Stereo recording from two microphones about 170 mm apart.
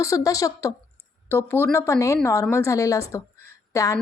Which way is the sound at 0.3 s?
20° left (ahead or behind).